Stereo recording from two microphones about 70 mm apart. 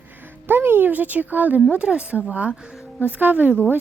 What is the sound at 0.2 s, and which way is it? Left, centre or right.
A woman's voice, right.